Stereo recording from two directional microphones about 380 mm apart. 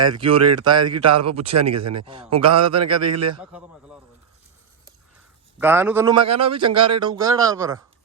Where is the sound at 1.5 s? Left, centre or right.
Right.